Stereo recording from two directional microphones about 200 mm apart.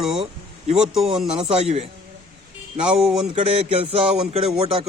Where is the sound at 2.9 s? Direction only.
5° right (ahead or behind).